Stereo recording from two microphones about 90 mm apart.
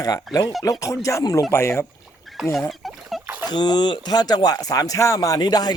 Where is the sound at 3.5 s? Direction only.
50° left (ahead or behind).